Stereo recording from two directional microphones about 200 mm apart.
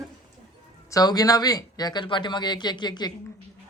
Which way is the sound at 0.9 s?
20° left (ahead or behind).